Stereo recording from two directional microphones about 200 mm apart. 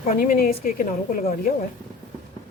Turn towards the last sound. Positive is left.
turn(degrees=45)  # may be behind; listen again after turning